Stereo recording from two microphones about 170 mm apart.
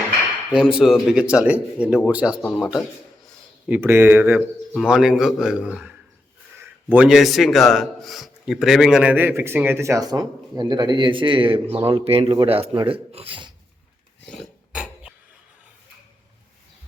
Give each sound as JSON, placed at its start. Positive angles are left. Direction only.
{"t": 0.5, "sound": "a man's voice", "side_deg": -5}
{"t": 3.7, "sound": "a man's voice", "side_deg": -15}
{"t": 14.3, "sound": "a sound", "side_deg": 0}